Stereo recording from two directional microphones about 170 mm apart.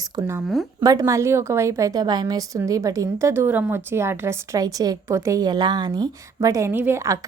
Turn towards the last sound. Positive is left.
turn(degrees=-15)  # may be behind; listen again after turning